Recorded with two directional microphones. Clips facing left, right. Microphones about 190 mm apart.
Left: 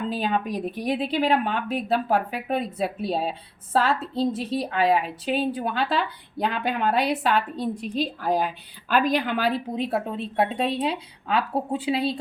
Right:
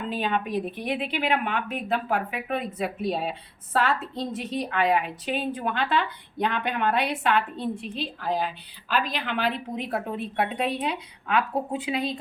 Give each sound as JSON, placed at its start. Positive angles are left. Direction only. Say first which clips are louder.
{"t": 0.1, "sound": "a woman's voice", "louder": "right 3 dB", "side_deg": 40}